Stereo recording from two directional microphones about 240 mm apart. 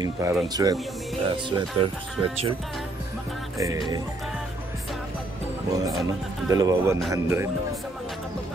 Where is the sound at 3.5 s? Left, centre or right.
Centre.